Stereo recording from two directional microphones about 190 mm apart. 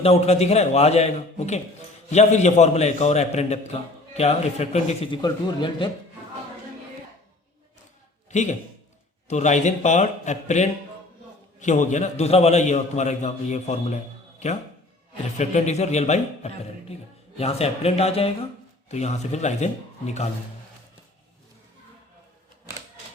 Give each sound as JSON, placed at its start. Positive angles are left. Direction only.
{"t": 0.0, "sound": "a man's voice", "side_deg": 35}
{"t": 5.2, "sound": "speech", "side_deg": 25}
{"t": 8.3, "sound": "a man's voice", "side_deg": 35}